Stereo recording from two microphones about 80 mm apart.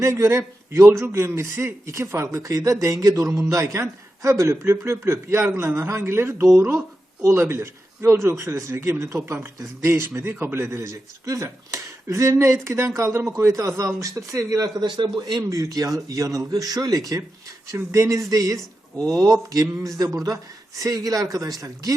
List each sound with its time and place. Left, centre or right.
0.0 s a man's voice: right
14.8 s a man's voice: right
15.4 s speech: right
17.7 s a man's voice: right